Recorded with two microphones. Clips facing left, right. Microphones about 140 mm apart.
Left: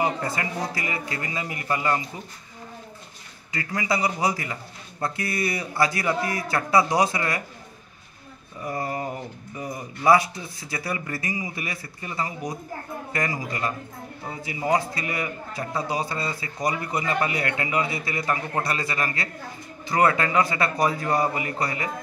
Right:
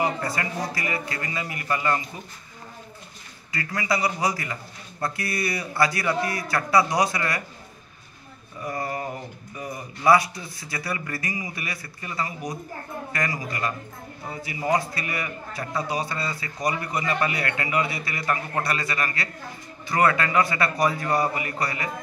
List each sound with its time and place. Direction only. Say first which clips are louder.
0.0 s a man's voice: even; 20° left (ahead or behind)
3.5 s a man's voice: even; 20° left (ahead or behind)
8.6 s a man's voice: left 1 dB; 20° left (ahead or behind)